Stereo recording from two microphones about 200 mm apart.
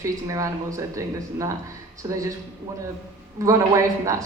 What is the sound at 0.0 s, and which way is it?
Speech, 15° right (ahead or behind).